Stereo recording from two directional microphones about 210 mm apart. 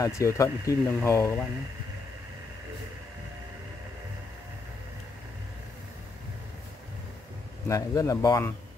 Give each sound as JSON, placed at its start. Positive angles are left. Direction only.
{"t": 0.0, "sound": "speech", "side_deg": 15}
{"t": 7.6, "sound": "speech", "side_deg": 15}